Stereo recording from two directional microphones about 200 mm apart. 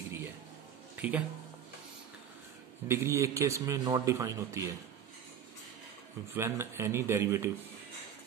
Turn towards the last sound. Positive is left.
turn(degrees=-15)  # may be behind; listen again after turning